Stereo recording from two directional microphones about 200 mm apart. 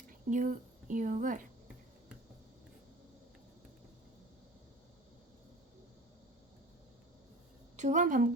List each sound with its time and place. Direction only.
0.1 s a woman's voice: 40° right (ahead or behind)
7.8 s a woman's voice: 35° right (ahead or behind)